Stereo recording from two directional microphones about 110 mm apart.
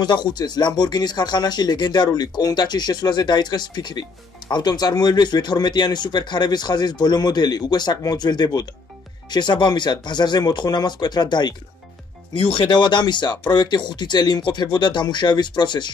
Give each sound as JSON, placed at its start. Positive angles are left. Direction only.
{"t": 0.0, "sound": "speech", "side_deg": 40}